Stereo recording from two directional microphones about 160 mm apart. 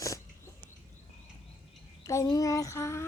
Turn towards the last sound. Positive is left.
turn(degrees=15)  # may be behind; listen again after turning